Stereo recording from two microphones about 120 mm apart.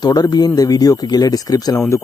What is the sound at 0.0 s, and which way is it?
Speech, 35° left (ahead or behind).